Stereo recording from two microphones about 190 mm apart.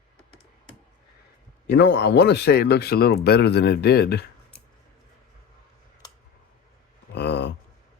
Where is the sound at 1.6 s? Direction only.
65° left (ahead or behind).